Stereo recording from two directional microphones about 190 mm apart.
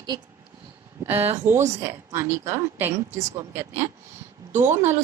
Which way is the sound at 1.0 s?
10° right (ahead or behind).